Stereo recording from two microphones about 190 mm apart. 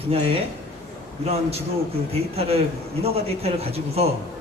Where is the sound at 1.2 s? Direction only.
30° right (ahead or behind).